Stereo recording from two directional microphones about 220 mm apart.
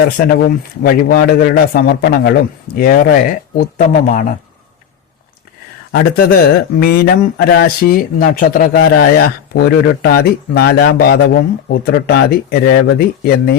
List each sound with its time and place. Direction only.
0.3 s speech: 45° left (ahead or behind)
5.9 s speech: 40° left (ahead or behind)